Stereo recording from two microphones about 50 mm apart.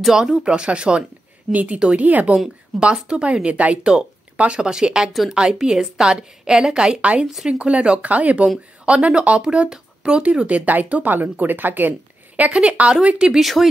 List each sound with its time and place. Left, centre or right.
0.1 s speech: centre
1.5 s speech: right
2.8 s a woman's voice: centre
7.2 s speech: centre; by 11.9 s right
12.4 s speech: right
13.3 s speech: centre